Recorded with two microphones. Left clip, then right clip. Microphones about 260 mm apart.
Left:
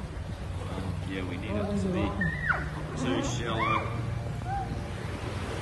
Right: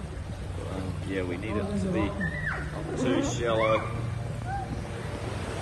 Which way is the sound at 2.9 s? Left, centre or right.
Centre.